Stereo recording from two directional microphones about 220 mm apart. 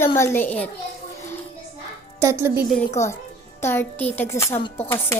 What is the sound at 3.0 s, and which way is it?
A woman's voice, 10° left (ahead or behind).